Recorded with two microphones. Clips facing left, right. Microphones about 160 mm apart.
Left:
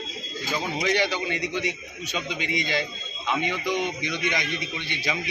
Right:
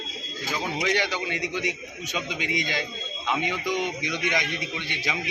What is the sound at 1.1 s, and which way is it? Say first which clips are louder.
A man's voice: left 1 dB; 15° right (ahead or behind).